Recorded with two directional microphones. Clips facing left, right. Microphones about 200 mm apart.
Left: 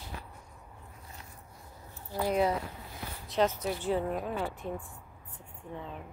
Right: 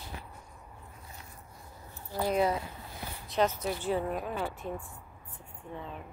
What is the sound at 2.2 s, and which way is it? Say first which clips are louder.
Speech: even; 15° left (ahead or behind).